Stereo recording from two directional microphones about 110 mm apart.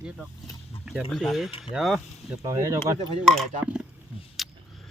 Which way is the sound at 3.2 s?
5° left (ahead or behind).